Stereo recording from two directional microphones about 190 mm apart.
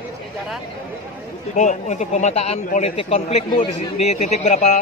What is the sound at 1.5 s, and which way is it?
Speech, 40° left (ahead or behind).